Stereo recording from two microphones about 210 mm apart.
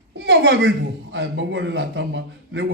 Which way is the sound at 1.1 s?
60° right (ahead or behind).